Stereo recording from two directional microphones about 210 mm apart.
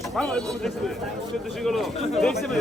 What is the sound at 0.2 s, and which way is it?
A man's voice, 5° left (ahead or behind).